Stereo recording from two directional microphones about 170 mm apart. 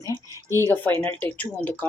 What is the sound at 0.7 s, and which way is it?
Speech, 10° left (ahead or behind).